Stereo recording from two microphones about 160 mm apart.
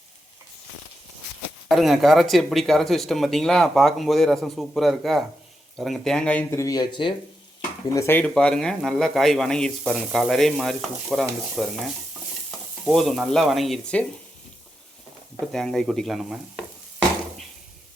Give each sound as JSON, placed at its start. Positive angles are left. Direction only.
{"t": 1.7, "sound": "speech", "side_deg": 0}
{"t": 7.9, "sound": "speech", "side_deg": 15}
{"t": 12.5, "sound": "stir", "side_deg": 0}
{"t": 15.5, "sound": "speech", "side_deg": 0}